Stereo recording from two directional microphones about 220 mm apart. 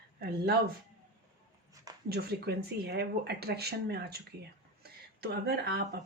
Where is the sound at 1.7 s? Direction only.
15° right (ahead or behind).